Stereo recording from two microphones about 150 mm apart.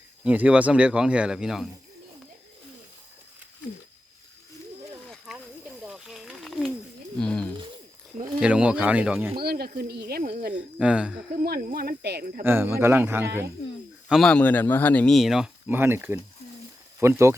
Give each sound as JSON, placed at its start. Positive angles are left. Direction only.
{"t": 0.3, "sound": "speech", "side_deg": -10}
{"t": 5.0, "sound": "a sound", "side_deg": 0}
{"t": 7.2, "sound": "speech", "side_deg": 5}
{"t": 8.4, "sound": "speech", "side_deg": -5}
{"t": 9.3, "sound": "speech", "side_deg": -90}
{"t": 10.5, "sound": "speech", "side_deg": -5}
{"t": 11.3, "sound": "speech", "side_deg": -90}
{"t": 12.4, "sound": "speech", "side_deg": -15}
{"t": 14.1, "sound": "a man's voice", "side_deg": 5}